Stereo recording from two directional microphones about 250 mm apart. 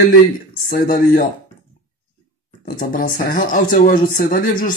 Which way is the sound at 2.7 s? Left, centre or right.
Left.